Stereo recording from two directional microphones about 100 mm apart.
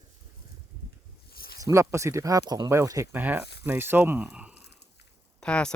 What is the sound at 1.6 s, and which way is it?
Speech, 30° right (ahead or behind).